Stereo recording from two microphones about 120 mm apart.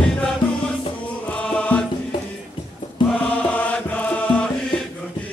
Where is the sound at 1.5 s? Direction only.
10° left (ahead or behind).